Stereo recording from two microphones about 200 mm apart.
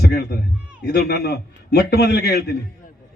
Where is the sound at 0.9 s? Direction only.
55° left (ahead or behind).